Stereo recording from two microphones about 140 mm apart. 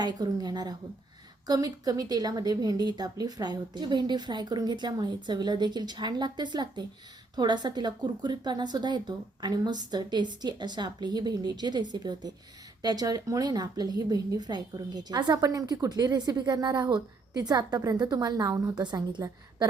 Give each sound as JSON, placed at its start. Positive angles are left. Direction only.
{"t": 0.0, "sound": "a woman's voice", "side_deg": -30}